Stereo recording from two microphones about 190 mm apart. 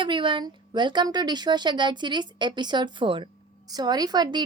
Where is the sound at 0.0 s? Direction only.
25° right (ahead or behind).